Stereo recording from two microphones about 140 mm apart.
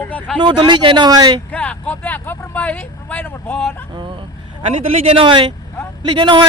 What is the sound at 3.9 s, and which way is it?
Vehicle, 35° right (ahead or behind).